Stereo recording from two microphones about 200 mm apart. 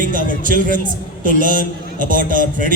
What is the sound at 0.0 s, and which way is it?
A man's voice, 40° right (ahead or behind).